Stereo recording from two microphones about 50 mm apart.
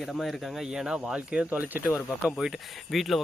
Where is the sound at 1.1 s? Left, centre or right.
Right.